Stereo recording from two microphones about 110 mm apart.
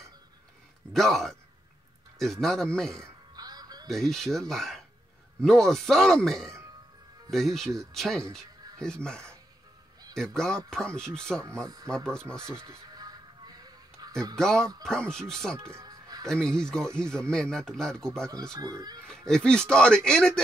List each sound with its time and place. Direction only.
0.9 s speech: centre (ahead or behind)
2.4 s speech: centre (ahead or behind)
2.9 s music: 30° right (ahead or behind)
3.8 s speech: 5° left (ahead or behind)
11.4 s speech: 30° right (ahead or behind)
12.1 s speech: 10° left (ahead or behind)
12.4 s music: 25° right (ahead or behind)
14.3 s speech: 5° left (ahead or behind)
15.5 s music: 30° right (ahead or behind)
16.3 s speech: 5° left (ahead or behind)
18.6 s speech: 35° right (ahead or behind)
19.0 s speech: 5° left (ahead or behind)